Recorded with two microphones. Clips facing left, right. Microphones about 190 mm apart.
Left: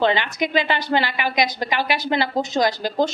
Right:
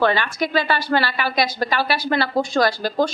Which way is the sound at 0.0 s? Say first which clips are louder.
Even; 20° left (ahead or behind).